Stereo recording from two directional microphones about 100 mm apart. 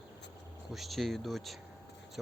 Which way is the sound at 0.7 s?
Centre (ahead or behind).